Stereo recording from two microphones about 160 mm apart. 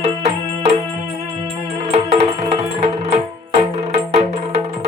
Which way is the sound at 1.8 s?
40° right (ahead or behind).